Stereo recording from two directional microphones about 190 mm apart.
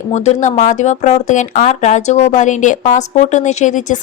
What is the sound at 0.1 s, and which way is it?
Speech, 35° left (ahead or behind).